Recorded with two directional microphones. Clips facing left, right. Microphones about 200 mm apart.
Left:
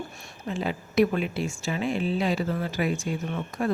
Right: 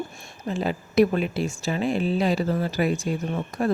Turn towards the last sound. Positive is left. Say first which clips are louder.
# right 3 dB
turn(degrees=-35)  # may be behind; listen again after turning